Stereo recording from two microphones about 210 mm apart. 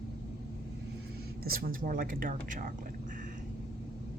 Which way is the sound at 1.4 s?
45° right (ahead or behind).